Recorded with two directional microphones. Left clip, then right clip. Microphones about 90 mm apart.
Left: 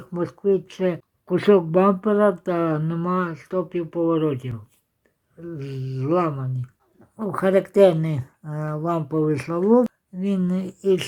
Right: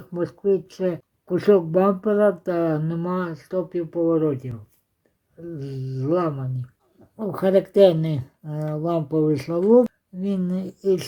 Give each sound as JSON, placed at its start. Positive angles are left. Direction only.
{"t": 0.0, "sound": "speech", "side_deg": -10}
{"t": 3.9, "sound": "speech", "side_deg": 10}
{"t": 5.5, "sound": "a sound", "side_deg": -5}
{"t": 7.2, "sound": "speech", "side_deg": -25}